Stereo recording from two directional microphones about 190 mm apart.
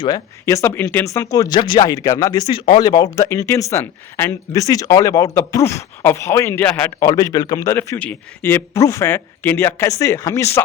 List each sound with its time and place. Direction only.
0.0 s speech: 20° left (ahead or behind)